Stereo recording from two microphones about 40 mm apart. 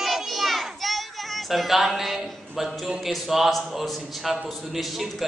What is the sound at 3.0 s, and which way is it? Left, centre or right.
A man's voice, centre.